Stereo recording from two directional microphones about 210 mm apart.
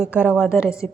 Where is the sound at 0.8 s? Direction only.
5° left (ahead or behind).